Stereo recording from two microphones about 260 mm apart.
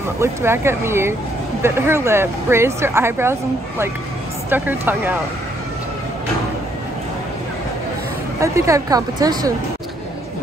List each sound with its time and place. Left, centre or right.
0.2 s speech: centre
8.4 s speech: centre